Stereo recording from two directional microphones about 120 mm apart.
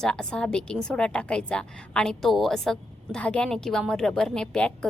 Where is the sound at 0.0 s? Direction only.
5° left (ahead or behind).